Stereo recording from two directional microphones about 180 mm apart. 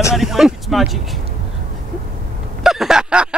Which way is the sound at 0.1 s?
Centre (ahead or behind).